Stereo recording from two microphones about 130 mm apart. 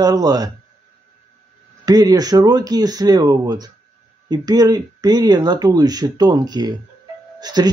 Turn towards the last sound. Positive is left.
turn(degrees=-30)  # may be behind; listen again after turning